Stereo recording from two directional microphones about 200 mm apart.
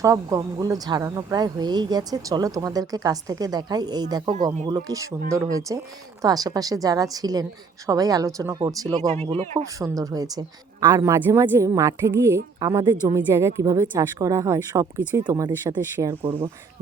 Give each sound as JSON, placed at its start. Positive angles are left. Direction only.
{"t": 0.0, "sound": "a woman's voice", "side_deg": -15}
{"t": 9.0, "sound": "speech", "side_deg": -35}
{"t": 9.8, "sound": "a woman's voice", "side_deg": -15}